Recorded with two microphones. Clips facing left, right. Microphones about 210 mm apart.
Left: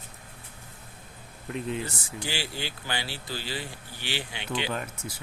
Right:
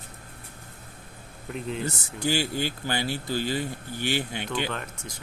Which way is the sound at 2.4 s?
50° right (ahead or behind).